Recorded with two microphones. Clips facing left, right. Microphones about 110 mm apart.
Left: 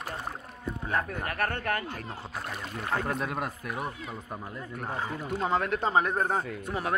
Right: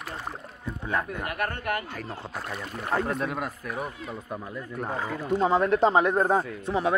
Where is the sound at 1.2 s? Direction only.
20° right (ahead or behind).